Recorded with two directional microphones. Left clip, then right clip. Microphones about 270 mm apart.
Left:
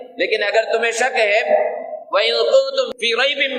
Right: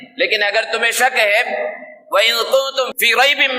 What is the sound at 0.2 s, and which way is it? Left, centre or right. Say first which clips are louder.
A man's voice: right 1 dB; right.